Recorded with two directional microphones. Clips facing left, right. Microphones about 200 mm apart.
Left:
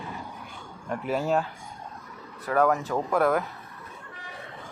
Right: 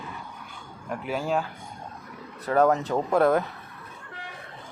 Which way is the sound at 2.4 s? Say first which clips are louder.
Right 2 dB; 25° right (ahead or behind).